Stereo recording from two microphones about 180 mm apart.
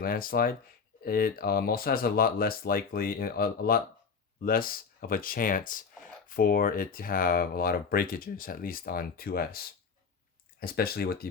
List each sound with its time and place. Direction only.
0.0 s speech: 55° left (ahead or behind)